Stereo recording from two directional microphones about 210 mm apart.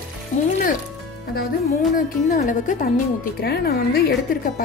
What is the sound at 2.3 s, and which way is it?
A woman's voice, 40° left (ahead or behind).